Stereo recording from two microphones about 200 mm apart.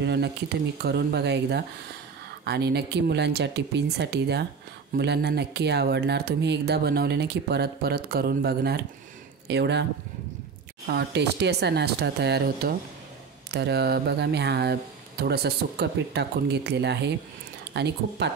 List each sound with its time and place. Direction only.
0.0 s speech: 60° right (ahead or behind)
10.9 s speech: 55° right (ahead or behind)